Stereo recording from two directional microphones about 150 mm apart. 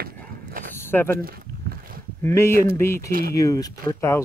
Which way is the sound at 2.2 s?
15° left (ahead or behind).